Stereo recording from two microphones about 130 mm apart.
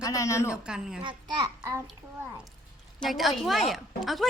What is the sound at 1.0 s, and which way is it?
Speech, 35° right (ahead or behind).